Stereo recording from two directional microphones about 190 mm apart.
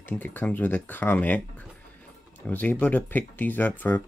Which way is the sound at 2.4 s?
10° left (ahead or behind).